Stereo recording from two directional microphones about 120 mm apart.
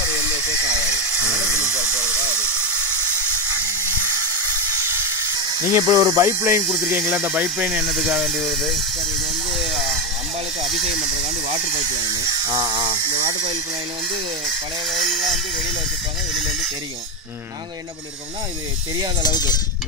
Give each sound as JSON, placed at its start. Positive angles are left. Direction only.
{"t": 1.6, "sound": "steam", "side_deg": -5}
{"t": 3.8, "sound": "steam", "side_deg": -20}
{"t": 4.8, "sound": "hiss", "side_deg": -20}
{"t": 6.7, "sound": "speech", "side_deg": -10}
{"t": 12.1, "sound": "speech", "side_deg": -30}
{"t": 14.9, "sound": "speech", "side_deg": 0}
{"t": 19.2, "sound": "cowbell", "side_deg": 35}